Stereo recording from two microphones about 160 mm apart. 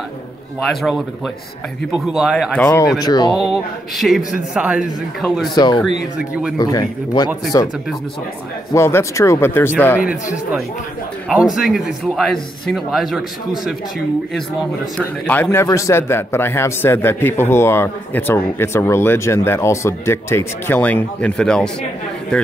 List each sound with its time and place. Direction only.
0.7 s a man's voice: centre (ahead or behind)
3.0 s a man's voice: 25° left (ahead or behind)
3.9 s a man's voice: centre (ahead or behind)
5.5 s a man's voice: 25° left (ahead or behind)
8.7 s a man's voice: 15° left (ahead or behind)
11.2 s a man's voice: centre (ahead or behind)